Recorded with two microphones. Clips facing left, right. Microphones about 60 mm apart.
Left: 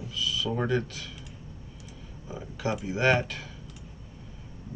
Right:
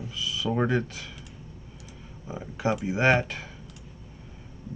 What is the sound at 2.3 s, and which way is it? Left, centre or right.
Speech, right.